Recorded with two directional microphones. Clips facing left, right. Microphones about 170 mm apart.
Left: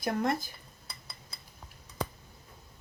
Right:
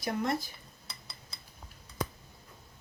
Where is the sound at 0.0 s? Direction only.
50° left (ahead or behind).